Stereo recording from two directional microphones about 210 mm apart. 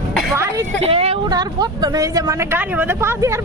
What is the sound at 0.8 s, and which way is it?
Speech, 30° right (ahead or behind).